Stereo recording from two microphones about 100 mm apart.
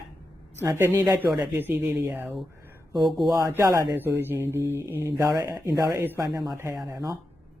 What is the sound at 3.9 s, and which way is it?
Speech, 20° right (ahead or behind).